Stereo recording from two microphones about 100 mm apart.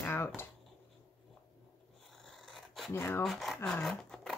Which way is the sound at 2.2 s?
Centre (ahead or behind).